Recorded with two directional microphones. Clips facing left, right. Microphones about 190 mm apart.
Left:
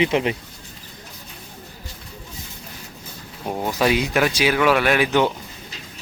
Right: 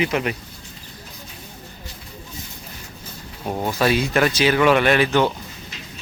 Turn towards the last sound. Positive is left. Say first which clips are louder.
# right 1 dB
turn(degrees=15)  # may be behind; listen again after turning